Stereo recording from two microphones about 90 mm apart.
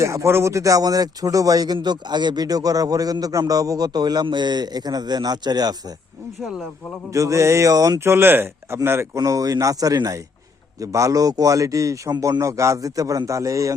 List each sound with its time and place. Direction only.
0.0 s speech: 30° right (ahead or behind); by 5.7 s 50° right (ahead or behind)
7.1 s a man's voice: 35° right (ahead or behind)
7.9 s speech: 30° right (ahead or behind)
9.1 s a man's voice: 40° right (ahead or behind)